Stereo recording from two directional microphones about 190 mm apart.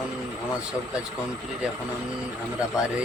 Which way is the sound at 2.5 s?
5° right (ahead or behind).